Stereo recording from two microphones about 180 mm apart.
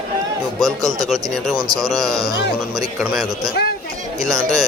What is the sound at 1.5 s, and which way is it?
Speech, 20° right (ahead or behind).